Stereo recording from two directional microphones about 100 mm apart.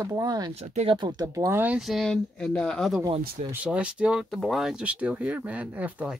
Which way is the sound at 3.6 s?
10° right (ahead or behind).